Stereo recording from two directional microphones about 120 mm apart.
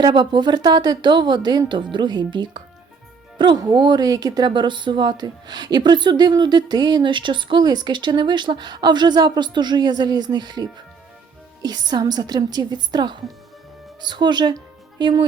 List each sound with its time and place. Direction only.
0.0 s speech: 40° right (ahead or behind)